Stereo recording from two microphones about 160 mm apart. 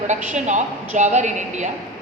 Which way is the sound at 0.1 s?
50° right (ahead or behind).